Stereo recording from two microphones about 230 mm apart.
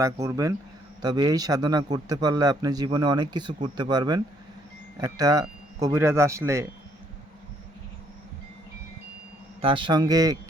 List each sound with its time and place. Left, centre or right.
0.0 s a man's voice: centre
9.6 s a man's voice: right